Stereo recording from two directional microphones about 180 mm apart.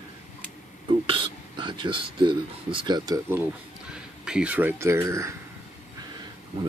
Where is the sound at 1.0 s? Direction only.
30° right (ahead or behind).